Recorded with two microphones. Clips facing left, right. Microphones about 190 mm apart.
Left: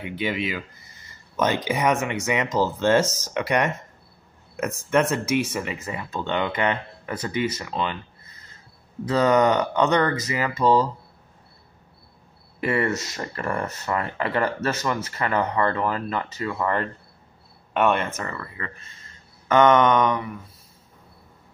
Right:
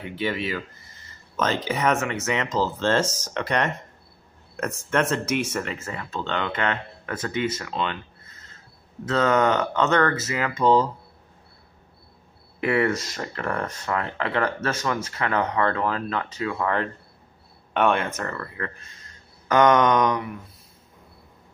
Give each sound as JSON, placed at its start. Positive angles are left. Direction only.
{"t": 0.0, "sound": "speech", "side_deg": 15}
{"t": 12.5, "sound": "speech", "side_deg": 0}
{"t": 19.4, "sound": "a sound", "side_deg": 5}